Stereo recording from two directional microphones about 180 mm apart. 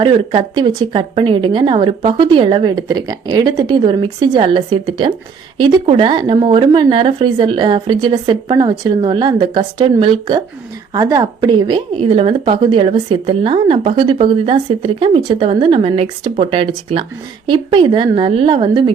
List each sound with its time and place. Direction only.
0.0 s speech: 30° right (ahead or behind)